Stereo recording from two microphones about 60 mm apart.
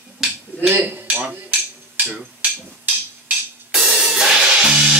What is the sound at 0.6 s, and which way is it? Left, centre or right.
Speech, right.